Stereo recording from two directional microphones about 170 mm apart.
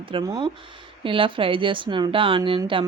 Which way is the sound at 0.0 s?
30° right (ahead or behind).